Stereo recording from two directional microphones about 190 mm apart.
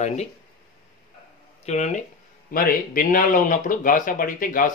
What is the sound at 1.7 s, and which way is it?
Speech, 35° left (ahead or behind).